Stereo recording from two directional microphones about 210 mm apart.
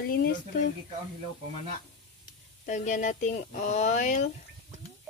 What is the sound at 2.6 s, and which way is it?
Speech, 35° left (ahead or behind).